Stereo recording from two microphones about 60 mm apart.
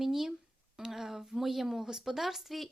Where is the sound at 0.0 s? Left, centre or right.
Centre.